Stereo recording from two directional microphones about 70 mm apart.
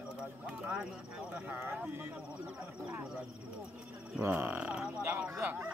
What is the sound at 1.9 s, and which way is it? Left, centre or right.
Speech, right.